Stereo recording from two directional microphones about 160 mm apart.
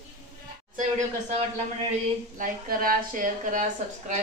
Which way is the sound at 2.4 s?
60° right (ahead or behind).